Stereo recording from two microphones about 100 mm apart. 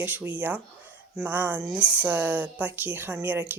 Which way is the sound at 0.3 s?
15° right (ahead or behind).